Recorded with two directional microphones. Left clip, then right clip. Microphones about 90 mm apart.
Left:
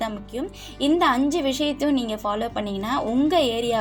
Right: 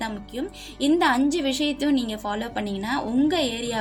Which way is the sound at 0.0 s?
5° left (ahead or behind).